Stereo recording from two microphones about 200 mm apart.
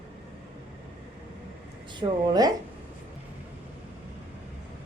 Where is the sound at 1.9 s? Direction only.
20° right (ahead or behind).